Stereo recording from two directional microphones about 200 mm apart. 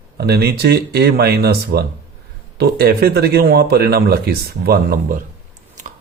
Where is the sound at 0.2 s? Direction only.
55° right (ahead or behind).